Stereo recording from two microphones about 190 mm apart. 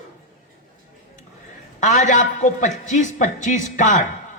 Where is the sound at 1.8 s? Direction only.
40° left (ahead or behind).